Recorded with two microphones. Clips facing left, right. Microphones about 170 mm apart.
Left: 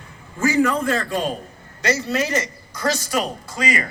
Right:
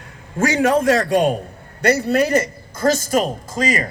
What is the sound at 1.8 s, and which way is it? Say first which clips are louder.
A man's voice: right 5 dB; 60° right (ahead or behind).